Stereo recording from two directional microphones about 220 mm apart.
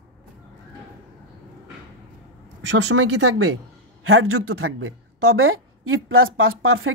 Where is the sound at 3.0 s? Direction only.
85° right.